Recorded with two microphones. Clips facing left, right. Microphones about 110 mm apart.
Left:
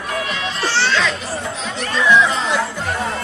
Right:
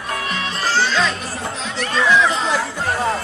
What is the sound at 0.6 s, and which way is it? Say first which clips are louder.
Music: left 1 dB; 75° left (ahead or behind).